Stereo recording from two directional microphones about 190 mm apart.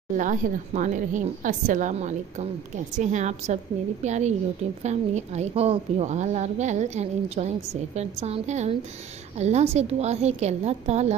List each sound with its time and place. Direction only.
0.2 s a woman's voice: 40° right (ahead or behind)